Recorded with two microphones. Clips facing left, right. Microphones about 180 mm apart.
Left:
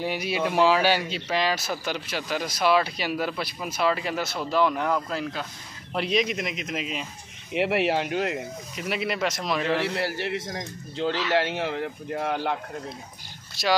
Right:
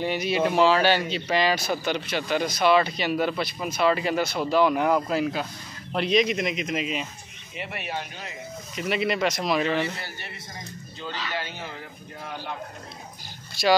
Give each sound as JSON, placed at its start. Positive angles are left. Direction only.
{"t": 0.0, "sound": "speech", "side_deg": 5}
{"t": 5.9, "sound": "speech", "side_deg": 5}
{"t": 7.5, "sound": "a man's voice", "side_deg": 90}
{"t": 8.7, "sound": "speech", "side_deg": 5}
{"t": 9.8, "sound": "a man's voice", "side_deg": 85}